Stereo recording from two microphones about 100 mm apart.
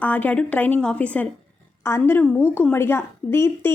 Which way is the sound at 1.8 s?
25° left (ahead or behind).